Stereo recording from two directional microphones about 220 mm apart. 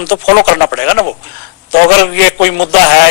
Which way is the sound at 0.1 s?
50° left (ahead or behind).